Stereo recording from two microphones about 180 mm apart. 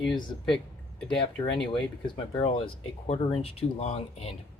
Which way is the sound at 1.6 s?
25° left (ahead or behind).